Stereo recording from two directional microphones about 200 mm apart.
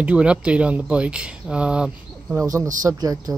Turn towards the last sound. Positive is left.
turn(degrees=-20)  # may be behind; listen again after turning